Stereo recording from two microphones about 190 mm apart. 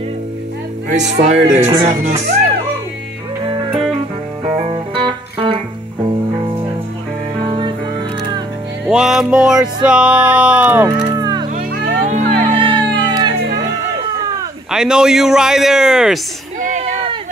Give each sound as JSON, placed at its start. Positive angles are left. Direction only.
{"t": 0.9, "sound": "speech", "side_deg": -35}
{"t": 3.4, "sound": "music", "side_deg": -25}
{"t": 7.4, "sound": "music", "side_deg": -25}
{"t": 8.8, "sound": "music", "side_deg": 0}
{"t": 11.1, "sound": "music", "side_deg": -20}
{"t": 11.5, "sound": "music", "side_deg": -45}
{"t": 12.5, "sound": "music", "side_deg": -25}
{"t": 14.7, "sound": "a man's voice", "side_deg": -5}
{"t": 16.6, "sound": "a sound", "side_deg": -40}